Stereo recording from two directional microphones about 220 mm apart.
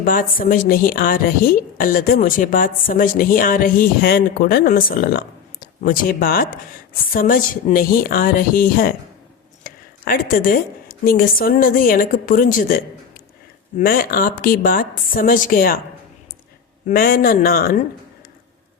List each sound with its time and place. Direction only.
0.0 s a woman's voice: 40° left (ahead or behind)
16.9 s a man's voice: 40° left (ahead or behind)